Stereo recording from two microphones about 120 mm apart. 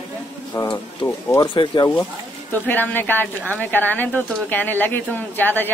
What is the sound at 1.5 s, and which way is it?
Speech, 45° left (ahead or behind).